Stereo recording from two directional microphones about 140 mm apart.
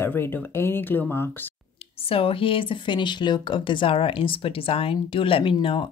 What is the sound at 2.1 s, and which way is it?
Speech, 40° left (ahead or behind).